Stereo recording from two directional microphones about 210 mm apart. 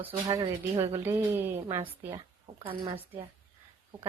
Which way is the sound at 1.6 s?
20° right (ahead or behind).